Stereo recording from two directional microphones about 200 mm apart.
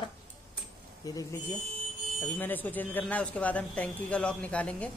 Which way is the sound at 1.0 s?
15° left (ahead or behind).